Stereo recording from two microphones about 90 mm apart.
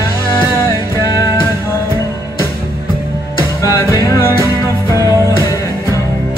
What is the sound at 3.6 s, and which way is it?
Music, 35° left (ahead or behind).